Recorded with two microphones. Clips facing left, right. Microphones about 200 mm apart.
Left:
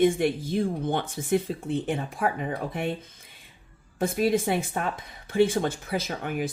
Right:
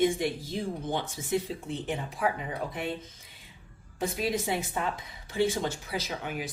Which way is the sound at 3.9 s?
55° left (ahead or behind).